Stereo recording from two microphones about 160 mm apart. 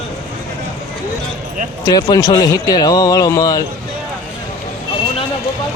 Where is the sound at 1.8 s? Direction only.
25° left (ahead or behind).